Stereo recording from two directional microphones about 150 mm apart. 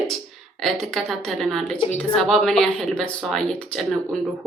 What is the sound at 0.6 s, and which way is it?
Speech, centre (ahead or behind).